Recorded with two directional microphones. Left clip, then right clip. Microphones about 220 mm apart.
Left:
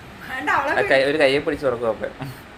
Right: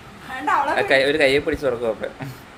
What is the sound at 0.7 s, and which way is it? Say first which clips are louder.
Speech: left 2 dB; 15° right (ahead or behind).